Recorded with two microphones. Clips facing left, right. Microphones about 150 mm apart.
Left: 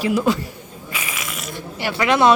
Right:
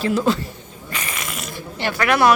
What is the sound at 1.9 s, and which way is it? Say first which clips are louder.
Speech: left 1 dB; 20° left (ahead or behind).